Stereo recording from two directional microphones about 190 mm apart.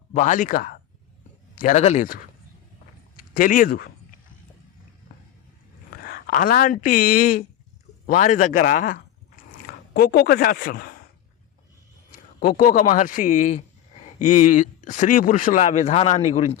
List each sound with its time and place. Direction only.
0.1 s speech: 40° left (ahead or behind)
3.3 s speech: 45° left (ahead or behind)
6.0 s speech: 55° left (ahead or behind)
12.4 s speech: 50° left (ahead or behind)